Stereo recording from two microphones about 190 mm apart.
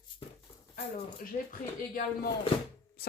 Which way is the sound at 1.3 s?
40° left (ahead or behind).